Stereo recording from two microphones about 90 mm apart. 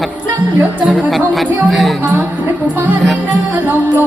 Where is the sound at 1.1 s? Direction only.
Centre (ahead or behind).